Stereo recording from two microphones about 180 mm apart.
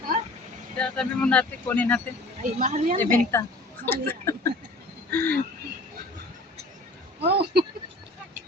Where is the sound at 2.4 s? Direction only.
45° right (ahead or behind).